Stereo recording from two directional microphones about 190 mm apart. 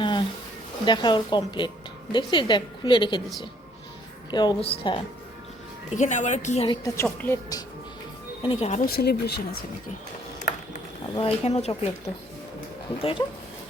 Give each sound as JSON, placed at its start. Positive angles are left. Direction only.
{"t": 0.0, "sound": "bee", "side_deg": 25}
{"t": 0.9, "sound": "a woman's voice", "side_deg": 25}
{"t": 4.3, "sound": "a woman's voice", "side_deg": 20}
{"t": 5.9, "sound": "a woman's voice", "side_deg": 40}
{"t": 6.7, "sound": "a woman's voice", "side_deg": 15}
{"t": 8.4, "sound": "a woman's voice", "side_deg": 30}
{"t": 8.8, "sound": "speech", "side_deg": 55}
{"t": 11.1, "sound": "a woman's voice", "side_deg": 30}
{"t": 13.0, "sound": "a woman's voice", "side_deg": 30}